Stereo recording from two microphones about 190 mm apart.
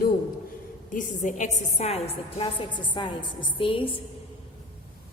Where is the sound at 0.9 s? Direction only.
45° left (ahead or behind); by 4.0 s 25° left (ahead or behind).